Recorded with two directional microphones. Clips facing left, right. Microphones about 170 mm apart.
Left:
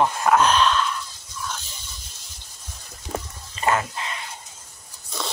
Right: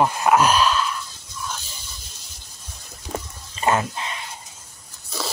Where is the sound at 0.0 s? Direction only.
10° right (ahead or behind).